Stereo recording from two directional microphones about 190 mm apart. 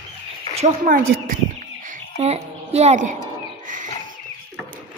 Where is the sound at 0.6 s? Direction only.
45° right (ahead or behind).